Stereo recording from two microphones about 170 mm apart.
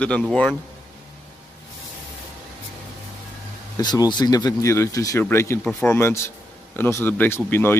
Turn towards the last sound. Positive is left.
turn(degrees=15)  # may be behind; listen again after turning